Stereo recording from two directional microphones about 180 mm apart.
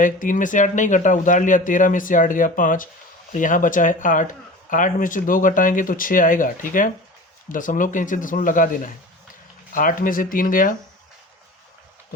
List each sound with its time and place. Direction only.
0.0 s speech: 45° left (ahead or behind)